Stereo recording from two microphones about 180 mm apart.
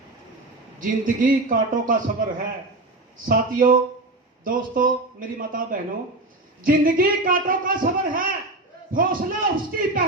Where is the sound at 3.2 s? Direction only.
50° right (ahead or behind).